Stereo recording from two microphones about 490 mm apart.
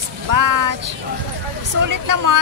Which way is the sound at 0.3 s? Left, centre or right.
Right.